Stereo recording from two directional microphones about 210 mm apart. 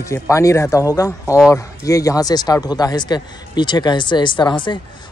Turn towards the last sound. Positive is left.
turn(degrees=20)  # may be behind; listen again after turning